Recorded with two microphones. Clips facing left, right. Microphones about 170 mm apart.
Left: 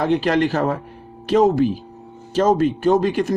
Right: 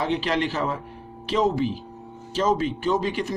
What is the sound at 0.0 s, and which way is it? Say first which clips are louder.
Speech: left 6 dB; 50° left (ahead or behind).